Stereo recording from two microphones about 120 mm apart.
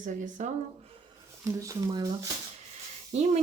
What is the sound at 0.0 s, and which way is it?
Speech, 90° right.